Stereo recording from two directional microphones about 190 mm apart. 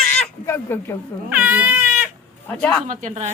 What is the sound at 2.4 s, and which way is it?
Speech, 10° left (ahead or behind).